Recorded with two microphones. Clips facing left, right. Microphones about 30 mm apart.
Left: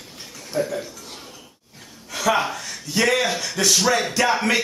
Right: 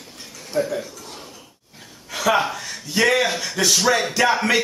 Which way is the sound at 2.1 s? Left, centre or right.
Centre.